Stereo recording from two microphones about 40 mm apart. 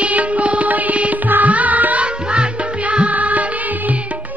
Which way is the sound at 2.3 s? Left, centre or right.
Right.